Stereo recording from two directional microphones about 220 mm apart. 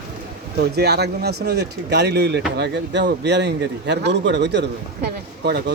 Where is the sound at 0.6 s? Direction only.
50° right (ahead or behind).